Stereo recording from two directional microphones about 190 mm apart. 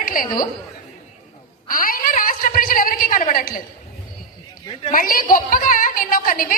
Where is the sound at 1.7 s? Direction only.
50° left (ahead or behind).